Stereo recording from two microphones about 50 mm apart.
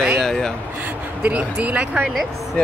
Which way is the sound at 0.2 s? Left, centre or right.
Centre.